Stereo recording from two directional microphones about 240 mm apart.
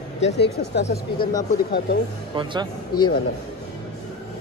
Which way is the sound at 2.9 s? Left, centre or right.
Left.